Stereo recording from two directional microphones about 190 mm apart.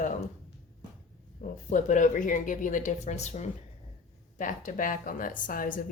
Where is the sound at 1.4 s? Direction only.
40° left (ahead or behind).